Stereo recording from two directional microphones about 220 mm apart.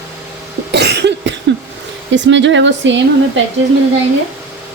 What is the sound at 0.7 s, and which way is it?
Cough, 50° right (ahead or behind).